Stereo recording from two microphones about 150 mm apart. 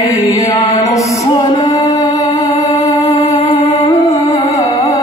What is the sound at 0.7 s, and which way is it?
Music, 20° left (ahead or behind).